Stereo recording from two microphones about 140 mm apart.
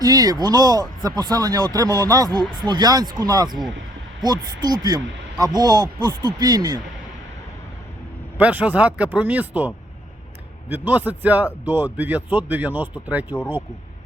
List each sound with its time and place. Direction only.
0.0 s speech: 25° right (ahead or behind)
8.4 s speech: 10° right (ahead or behind)